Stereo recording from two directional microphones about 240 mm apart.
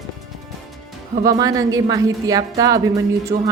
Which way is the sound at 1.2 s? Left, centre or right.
Centre.